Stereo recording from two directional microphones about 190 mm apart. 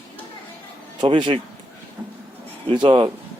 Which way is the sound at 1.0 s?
25° right (ahead or behind).